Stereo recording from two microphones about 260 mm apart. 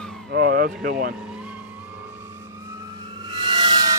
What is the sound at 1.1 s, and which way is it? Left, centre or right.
Vehicle, centre.